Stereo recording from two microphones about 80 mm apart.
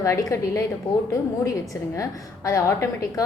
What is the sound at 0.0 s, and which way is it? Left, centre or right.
Speech, left.